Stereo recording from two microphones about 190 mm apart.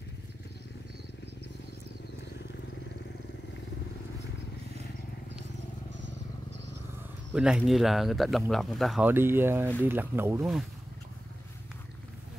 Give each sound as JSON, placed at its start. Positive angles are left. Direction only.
{"t": 5.9, "sound": "vehicle", "side_deg": -70}
{"t": 7.3, "sound": "speech", "side_deg": -5}
{"t": 9.1, "sound": "speech", "side_deg": -10}